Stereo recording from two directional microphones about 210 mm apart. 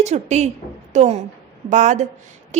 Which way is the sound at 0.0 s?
35° right (ahead or behind).